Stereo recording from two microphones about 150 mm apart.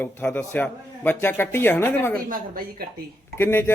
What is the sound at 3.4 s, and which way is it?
Speech, 15° left (ahead or behind).